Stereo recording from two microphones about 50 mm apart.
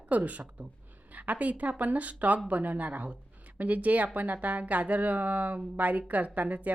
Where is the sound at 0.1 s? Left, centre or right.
Right.